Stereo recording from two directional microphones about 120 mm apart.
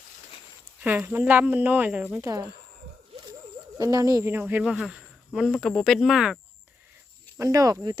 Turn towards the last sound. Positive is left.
turn(degrees=-30)  # may be behind; listen again after turning